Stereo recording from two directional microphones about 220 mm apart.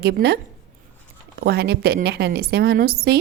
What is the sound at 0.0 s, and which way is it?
Speech, 45° right (ahead or behind).